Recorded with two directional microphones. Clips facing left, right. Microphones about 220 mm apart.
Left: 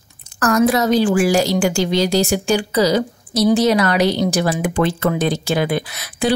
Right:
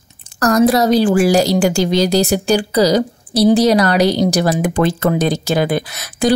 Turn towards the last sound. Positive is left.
turn(degrees=-45)  # may be behind; listen again after turning